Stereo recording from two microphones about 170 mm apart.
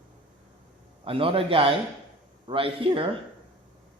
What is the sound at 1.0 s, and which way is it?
Speech, 30° right (ahead or behind).